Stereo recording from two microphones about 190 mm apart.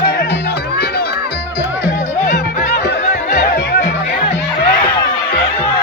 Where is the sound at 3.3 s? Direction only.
55° left (ahead or behind).